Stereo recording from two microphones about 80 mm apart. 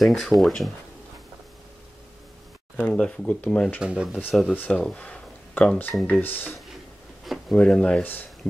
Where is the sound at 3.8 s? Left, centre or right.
Centre.